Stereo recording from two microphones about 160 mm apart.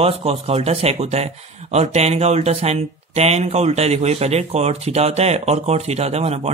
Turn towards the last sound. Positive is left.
turn(degrees=-40)  # may be behind; listen again after turning